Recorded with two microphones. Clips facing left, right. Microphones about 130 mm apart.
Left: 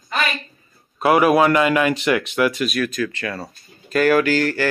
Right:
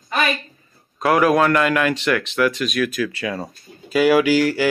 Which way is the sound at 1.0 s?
5° left (ahead or behind).